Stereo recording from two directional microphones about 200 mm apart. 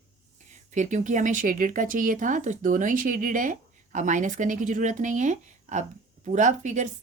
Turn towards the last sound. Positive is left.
turn(degrees=-35)  # may be behind; listen again after turning